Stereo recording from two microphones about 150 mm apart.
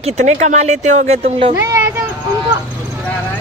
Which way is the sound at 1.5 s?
15° right (ahead or behind).